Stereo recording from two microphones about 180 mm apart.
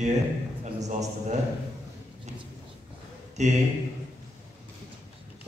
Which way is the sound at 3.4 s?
40° right (ahead or behind).